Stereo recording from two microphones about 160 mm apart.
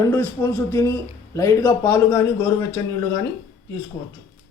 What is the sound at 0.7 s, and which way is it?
A man's voice, 15° left (ahead or behind).